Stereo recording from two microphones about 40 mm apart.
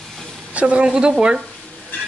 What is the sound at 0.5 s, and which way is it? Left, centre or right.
Speech, right.